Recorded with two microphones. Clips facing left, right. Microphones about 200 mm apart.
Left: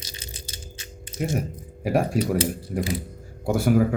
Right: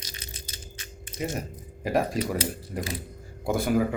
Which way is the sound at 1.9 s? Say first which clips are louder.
Left 3 dB; 10° left (ahead or behind).